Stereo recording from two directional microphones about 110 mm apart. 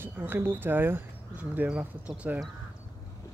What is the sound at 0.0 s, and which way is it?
Speech, 20° right (ahead or behind).